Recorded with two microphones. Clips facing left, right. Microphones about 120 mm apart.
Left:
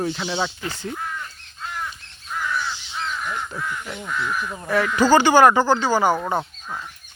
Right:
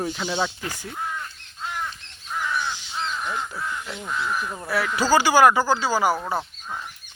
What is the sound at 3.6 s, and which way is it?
Speech, 5° right (ahead or behind).